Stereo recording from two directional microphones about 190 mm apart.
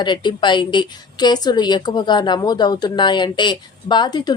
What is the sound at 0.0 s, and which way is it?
A woman's voice, 25° left (ahead or behind).